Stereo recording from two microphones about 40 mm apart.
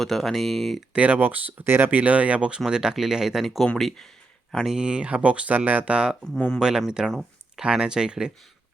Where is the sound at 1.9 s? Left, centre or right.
Right.